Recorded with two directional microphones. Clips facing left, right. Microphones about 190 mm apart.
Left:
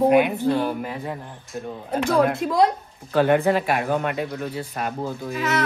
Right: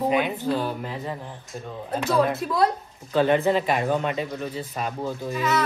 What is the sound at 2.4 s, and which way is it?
Speech, 20° left (ahead or behind).